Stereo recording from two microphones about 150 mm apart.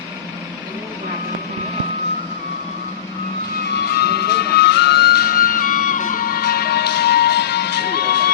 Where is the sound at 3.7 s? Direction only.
90° left.